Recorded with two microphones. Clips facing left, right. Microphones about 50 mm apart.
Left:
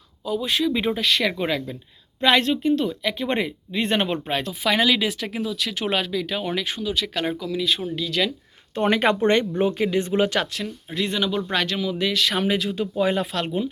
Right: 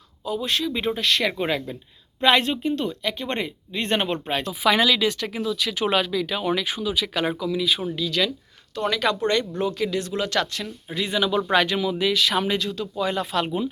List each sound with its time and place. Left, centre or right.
0.3 s speech: centre
8.7 s speech: left
10.2 s speech: centre
12.7 s speech: centre
13.3 s speech: centre